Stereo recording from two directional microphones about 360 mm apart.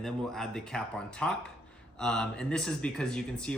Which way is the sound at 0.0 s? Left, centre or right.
Centre.